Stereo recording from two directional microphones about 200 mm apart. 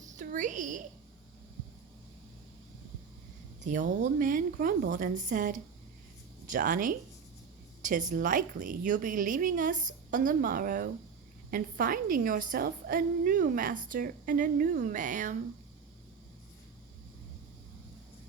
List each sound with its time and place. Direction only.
0.2 s a woman's voice: 40° right (ahead or behind)
3.7 s a woman's voice: 40° right (ahead or behind)